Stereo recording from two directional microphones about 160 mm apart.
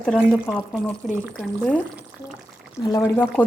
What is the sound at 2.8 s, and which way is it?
Speech, 20° left (ahead or behind).